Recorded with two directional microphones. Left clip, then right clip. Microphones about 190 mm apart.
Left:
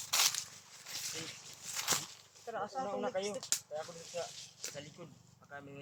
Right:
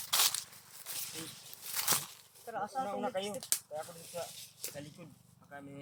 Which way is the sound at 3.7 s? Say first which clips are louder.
Even; 30° right (ahead or behind).